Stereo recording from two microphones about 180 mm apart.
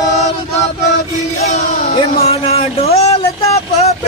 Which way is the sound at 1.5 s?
50° left (ahead or behind).